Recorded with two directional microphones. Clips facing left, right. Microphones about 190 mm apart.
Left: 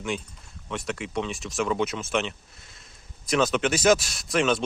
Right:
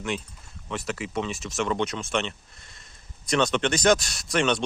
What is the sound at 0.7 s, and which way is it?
Speech, centre (ahead or behind).